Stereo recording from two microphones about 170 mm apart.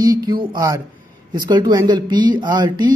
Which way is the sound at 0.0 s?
20° right (ahead or behind).